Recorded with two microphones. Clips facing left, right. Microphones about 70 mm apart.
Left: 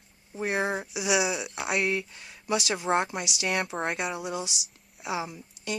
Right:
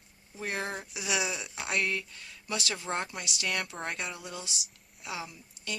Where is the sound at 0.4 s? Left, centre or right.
Centre.